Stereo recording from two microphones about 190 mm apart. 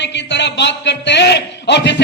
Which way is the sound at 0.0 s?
65° left (ahead or behind).